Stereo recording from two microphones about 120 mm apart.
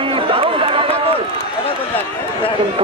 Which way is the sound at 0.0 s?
50° right (ahead or behind).